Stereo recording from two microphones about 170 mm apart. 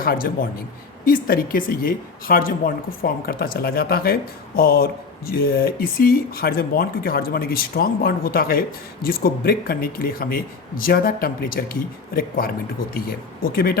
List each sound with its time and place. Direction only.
0.0 s a man's voice: 60° left (ahead or behind)